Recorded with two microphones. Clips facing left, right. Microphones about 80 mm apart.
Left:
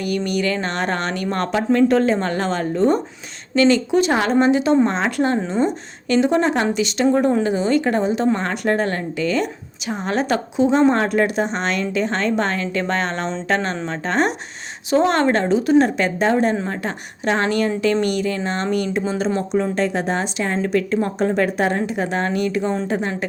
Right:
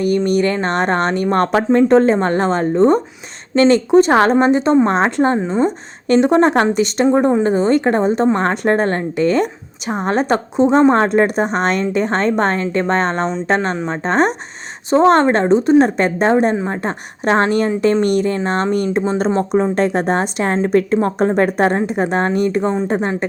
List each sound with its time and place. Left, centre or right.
0.3 s a woman's voice: right
1.7 s a woman's voice: right
5.1 s speech: right
5.6 s speech: right
7.0 s speech: right
7.5 s a woman's voice: right
11.4 s a woman's voice: right
13.7 s speech: right
14.0 s a woman's voice: right
16.3 s speech: right
16.6 s a woman's voice: right
20.6 s a woman's voice: right